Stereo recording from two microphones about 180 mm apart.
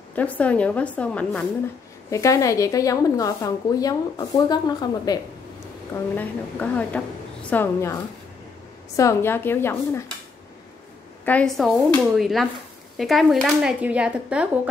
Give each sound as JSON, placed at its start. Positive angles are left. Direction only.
{"t": 0.1, "sound": "a woman's voice", "side_deg": 10}
{"t": 6.1, "sound": "a woman's voice", "side_deg": 10}
{"t": 8.9, "sound": "a woman's voice", "side_deg": 15}
{"t": 11.2, "sound": "speech", "side_deg": 5}